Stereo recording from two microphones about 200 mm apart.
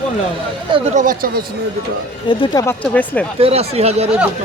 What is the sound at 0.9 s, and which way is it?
Speech, 45° right (ahead or behind).